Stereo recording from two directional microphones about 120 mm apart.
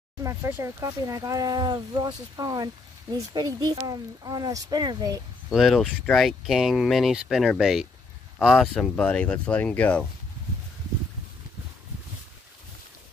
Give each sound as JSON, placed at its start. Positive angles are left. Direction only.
{"t": 0.2, "sound": "speech", "side_deg": -25}
{"t": 5.5, "sound": "speech", "side_deg": 0}
{"t": 8.7, "sound": "speech", "side_deg": 10}